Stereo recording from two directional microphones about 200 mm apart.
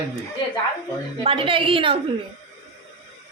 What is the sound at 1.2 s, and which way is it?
Speech, 25° right (ahead or behind).